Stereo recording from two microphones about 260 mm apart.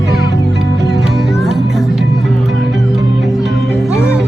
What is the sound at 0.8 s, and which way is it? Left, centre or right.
Music, right.